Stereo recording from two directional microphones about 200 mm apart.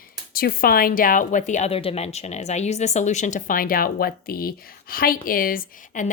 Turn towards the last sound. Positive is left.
turn(degrees=40)  # may be behind; listen again after turning